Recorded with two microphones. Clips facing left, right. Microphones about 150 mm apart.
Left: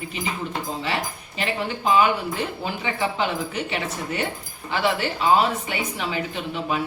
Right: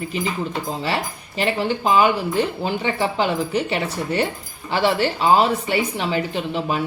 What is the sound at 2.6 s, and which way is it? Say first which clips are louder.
Speech: right 4 dB; 35° right (ahead or behind).